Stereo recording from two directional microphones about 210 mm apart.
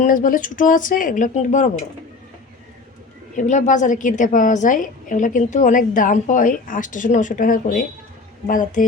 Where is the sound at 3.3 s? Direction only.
35° left (ahead or behind).